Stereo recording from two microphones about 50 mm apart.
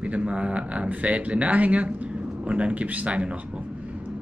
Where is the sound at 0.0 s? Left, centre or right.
Right.